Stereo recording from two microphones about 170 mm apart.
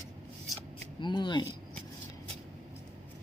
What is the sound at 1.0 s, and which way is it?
Speech, 25° left (ahead or behind).